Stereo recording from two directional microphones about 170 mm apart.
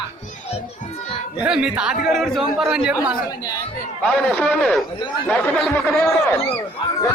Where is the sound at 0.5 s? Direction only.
35° left (ahead or behind).